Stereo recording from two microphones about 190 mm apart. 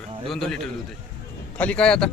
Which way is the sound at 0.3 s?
Centre (ahead or behind).